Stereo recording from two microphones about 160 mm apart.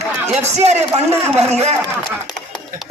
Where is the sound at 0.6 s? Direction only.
45° right (ahead or behind).